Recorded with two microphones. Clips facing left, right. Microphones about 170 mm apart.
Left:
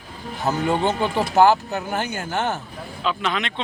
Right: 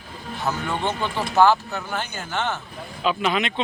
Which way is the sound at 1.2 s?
45° left (ahead or behind).